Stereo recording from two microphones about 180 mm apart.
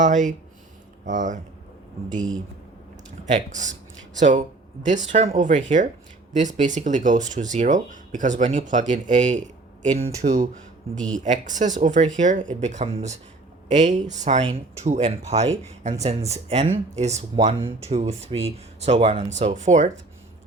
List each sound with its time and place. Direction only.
0.0 s speech: 45° right (ahead or behind)
3.3 s speech: 45° right (ahead or behind)
10.2 s speech: 20° right (ahead or behind)
11.2 s speech: 40° right (ahead or behind)